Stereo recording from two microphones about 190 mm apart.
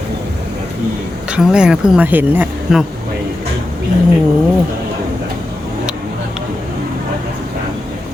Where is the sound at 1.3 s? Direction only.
5° right (ahead or behind).